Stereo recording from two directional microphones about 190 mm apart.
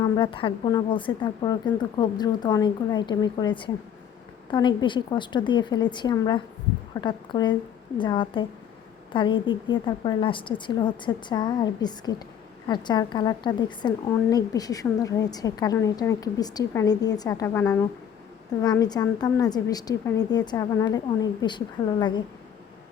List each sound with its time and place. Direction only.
0.0 s a woman's voice: 25° left (ahead or behind)